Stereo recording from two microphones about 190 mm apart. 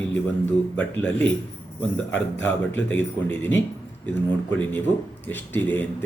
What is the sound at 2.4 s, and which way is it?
Speech, 10° left (ahead or behind).